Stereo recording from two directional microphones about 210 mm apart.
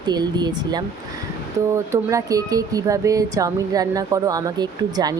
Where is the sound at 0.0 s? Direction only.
20° right (ahead or behind).